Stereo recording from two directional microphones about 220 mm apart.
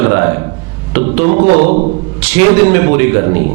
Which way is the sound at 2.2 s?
10° right (ahead or behind).